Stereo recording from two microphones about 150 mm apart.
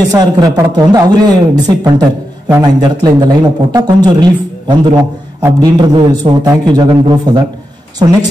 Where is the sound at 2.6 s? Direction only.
25° right (ahead or behind).